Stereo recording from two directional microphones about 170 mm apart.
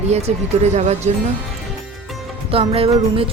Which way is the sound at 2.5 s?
35° right (ahead or behind).